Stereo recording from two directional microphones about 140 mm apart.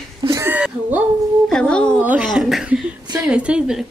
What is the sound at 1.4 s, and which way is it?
Speech, 5° left (ahead or behind).